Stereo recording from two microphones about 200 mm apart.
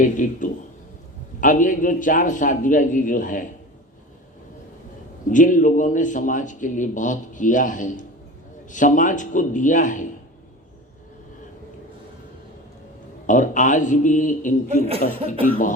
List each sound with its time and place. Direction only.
0.0 s a man's voice: 40° left (ahead or behind)
5.3 s a man's voice: 40° left (ahead or behind)
13.2 s a man's voice: 40° left (ahead or behind)